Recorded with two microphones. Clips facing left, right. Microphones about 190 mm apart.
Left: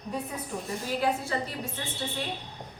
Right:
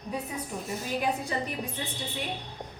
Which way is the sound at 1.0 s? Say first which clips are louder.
Left 2 dB; 15° right (ahead or behind).